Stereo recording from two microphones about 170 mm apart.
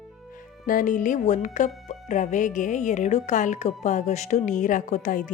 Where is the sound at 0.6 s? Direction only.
50° left (ahead or behind).